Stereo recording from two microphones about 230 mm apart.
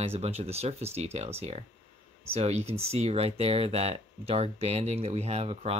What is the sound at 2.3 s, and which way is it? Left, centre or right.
Speech, right.